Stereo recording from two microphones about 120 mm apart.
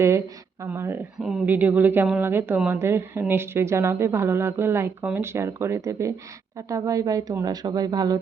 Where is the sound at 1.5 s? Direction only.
15° right (ahead or behind).